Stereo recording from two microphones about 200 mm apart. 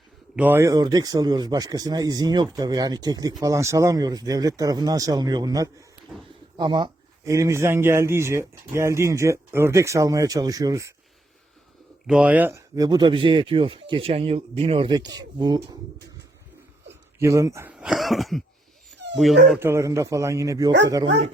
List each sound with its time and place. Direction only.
0.3 s speech: 10° right (ahead or behind)
12.0 s speech: 5° right (ahead or behind); by 15.6 s 20° right (ahead or behind)
17.2 s speech: 15° right (ahead or behind); by 19.4 s centre (ahead or behind)
19.5 s speech: 10° right (ahead or behind)